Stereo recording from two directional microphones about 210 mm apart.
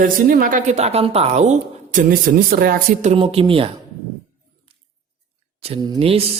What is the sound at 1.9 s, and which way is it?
Speech, 45° right (ahead or behind).